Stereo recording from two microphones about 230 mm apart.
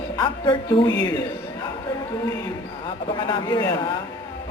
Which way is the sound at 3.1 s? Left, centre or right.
Left.